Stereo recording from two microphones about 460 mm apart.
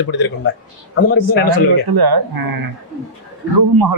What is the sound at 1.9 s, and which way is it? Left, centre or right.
Speech, right.